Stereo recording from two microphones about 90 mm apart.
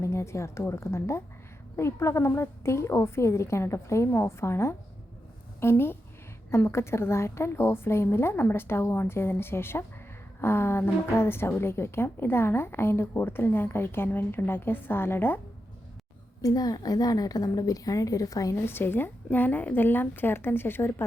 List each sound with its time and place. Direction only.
0.0 s a woman's voice: 30° left (ahead or behind)
16.4 s a woman's voice: 45° left (ahead or behind)
18.6 s a woman's voice: 25° left (ahead or behind)